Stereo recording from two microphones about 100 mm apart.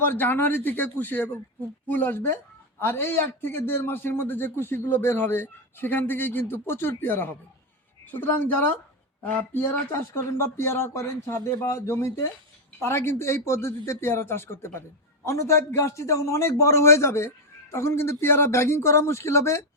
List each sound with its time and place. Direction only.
0.0 s a man's voice: 20° left (ahead or behind)